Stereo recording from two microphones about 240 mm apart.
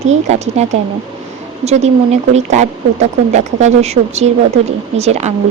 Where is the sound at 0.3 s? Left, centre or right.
Right.